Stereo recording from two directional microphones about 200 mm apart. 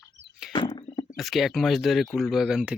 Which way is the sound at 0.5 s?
25° left (ahead or behind).